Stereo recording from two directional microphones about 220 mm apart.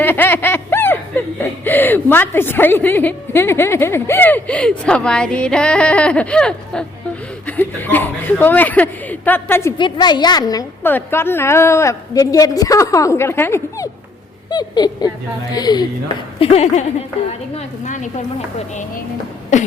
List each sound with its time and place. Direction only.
0.0 s snicker: 10° left (ahead or behind)
7.4 s a man's voice: 10° left (ahead or behind); by 18.1 s 35° left (ahead or behind)